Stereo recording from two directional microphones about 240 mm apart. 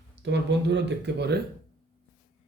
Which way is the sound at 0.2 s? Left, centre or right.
Right.